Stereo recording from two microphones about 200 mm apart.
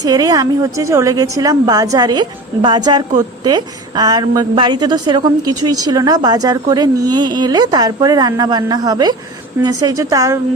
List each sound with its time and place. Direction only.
0.0 s a woman's voice: 20° right (ahead or behind)